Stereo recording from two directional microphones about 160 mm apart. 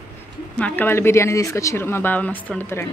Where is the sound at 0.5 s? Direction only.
10° left (ahead or behind).